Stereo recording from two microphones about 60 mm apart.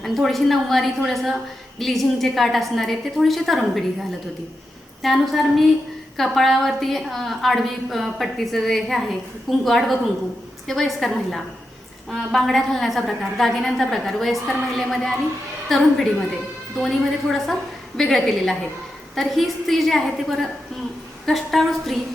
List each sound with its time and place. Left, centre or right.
0.0 s a woman's voice: centre
5.0 s a woman's voice: centre